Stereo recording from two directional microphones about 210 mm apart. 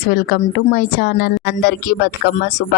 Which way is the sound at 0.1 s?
50° left (ahead or behind).